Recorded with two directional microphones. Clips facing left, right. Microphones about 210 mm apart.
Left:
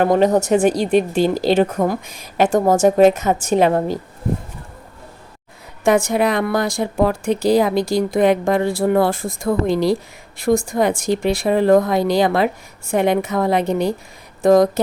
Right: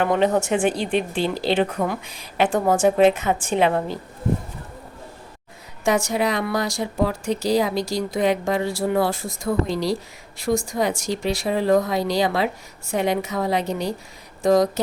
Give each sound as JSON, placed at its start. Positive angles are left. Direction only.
{"t": 0.0, "sound": "a woman's voice", "side_deg": 40}
{"t": 5.8, "sound": "a woman's voice", "side_deg": 55}